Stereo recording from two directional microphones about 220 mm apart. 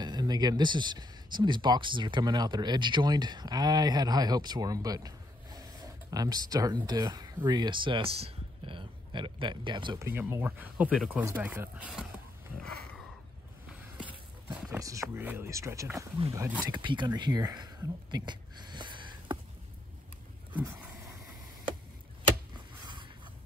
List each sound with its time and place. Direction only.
0.0 s speech: 20° right (ahead or behind)
10.0 s speech: 10° right (ahead or behind)
14.0 s speech: 5° right (ahead or behind)
16.7 s speech: 20° right (ahead or behind)